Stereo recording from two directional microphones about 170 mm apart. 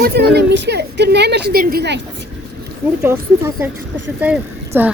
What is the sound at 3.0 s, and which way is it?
A woman's voice, 15° right (ahead or behind).